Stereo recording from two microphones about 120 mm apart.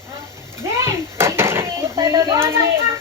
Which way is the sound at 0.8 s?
20° right (ahead or behind).